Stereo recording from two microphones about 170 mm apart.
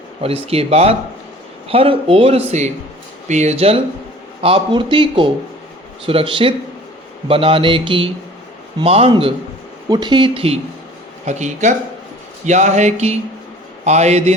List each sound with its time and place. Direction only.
0.2 s speech: 35° right (ahead or behind)